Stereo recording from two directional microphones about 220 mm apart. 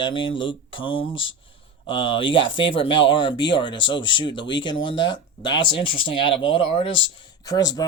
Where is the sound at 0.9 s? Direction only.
60° left (ahead or behind).